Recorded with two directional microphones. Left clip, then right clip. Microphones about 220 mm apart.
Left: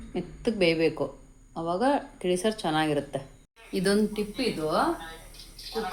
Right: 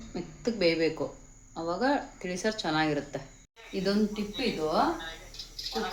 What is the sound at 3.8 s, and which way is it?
Speech, 55° left (ahead or behind).